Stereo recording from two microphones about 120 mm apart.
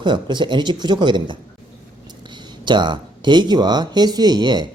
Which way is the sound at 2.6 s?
40° right (ahead or behind).